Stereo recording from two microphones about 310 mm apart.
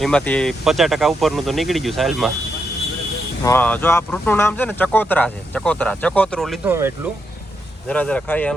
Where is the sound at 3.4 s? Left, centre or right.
Centre.